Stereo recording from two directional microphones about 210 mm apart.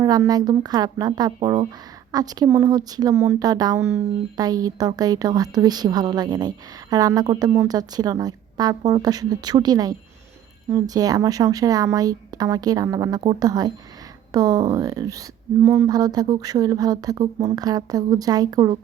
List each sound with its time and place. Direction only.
0.0 s speech: 15° right (ahead or behind)